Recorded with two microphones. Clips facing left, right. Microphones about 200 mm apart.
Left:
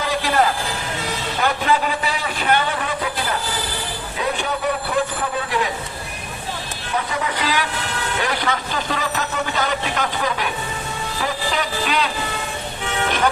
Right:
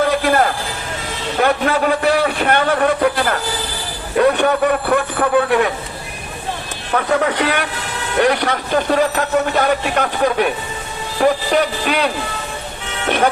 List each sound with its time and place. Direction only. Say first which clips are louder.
0.0 s music: right 5 dB; 55° right (ahead or behind)
1.4 s speech: right 5 dB; 55° right (ahead or behind)
6.9 s speech: right 8 dB; 65° right (ahead or behind)